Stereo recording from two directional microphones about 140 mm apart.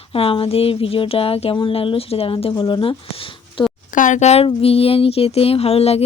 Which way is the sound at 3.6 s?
35° left (ahead or behind).